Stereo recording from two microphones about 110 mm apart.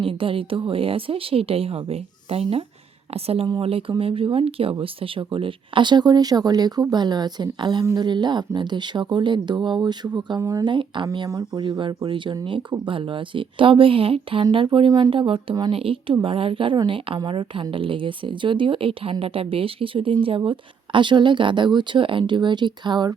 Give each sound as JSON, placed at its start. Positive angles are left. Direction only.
{"t": 0.0, "sound": "a woman's voice", "side_deg": -55}
{"t": 10.7, "sound": "a woman's voice", "side_deg": -45}